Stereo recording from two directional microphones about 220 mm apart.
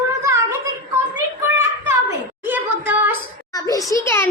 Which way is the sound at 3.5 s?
15° left (ahead or behind).